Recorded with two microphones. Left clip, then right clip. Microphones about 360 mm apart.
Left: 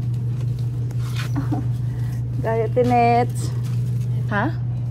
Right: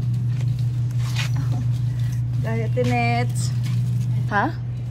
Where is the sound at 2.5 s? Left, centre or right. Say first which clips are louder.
Left 6 dB; centre.